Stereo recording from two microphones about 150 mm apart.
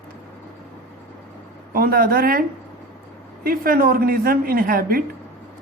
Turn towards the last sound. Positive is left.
turn(degrees=-75)  # may be behind; listen again after turning